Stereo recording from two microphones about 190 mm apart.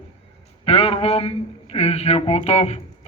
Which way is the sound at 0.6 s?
30° left (ahead or behind).